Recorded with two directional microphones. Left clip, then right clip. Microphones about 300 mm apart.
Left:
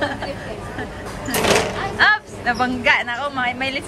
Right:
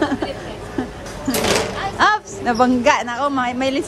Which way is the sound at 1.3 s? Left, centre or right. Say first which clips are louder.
Left 1 dB; centre.